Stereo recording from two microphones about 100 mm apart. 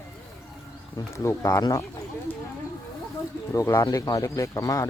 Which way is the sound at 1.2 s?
30° left (ahead or behind).